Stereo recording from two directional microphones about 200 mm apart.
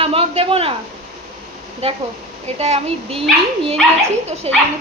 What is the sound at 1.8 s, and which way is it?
Speech, 30° right (ahead or behind).